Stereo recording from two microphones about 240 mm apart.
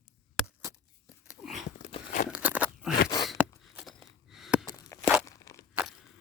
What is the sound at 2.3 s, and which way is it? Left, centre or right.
Crunch, centre.